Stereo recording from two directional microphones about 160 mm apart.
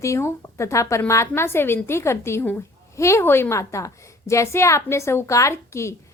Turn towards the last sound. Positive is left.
turn(degrees=15)  # may be behind; listen again after turning